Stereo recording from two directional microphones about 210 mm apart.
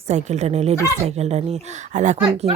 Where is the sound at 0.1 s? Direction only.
35° right (ahead or behind).